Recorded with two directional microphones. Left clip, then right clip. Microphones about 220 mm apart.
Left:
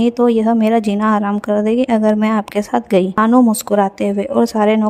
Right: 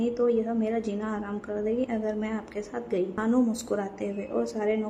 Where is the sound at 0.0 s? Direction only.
50° left (ahead or behind).